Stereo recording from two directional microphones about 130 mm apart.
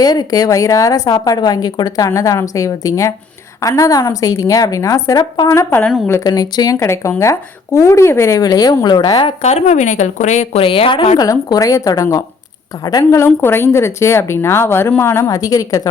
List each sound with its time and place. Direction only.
0.0 s a woman's voice: 30° left (ahead or behind)
9.4 s a woman's voice: 55° left (ahead or behind)
11.2 s speech: 30° left (ahead or behind)